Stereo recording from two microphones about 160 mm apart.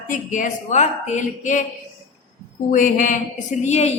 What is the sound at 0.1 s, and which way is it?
A woman's voice, 50° left (ahead or behind).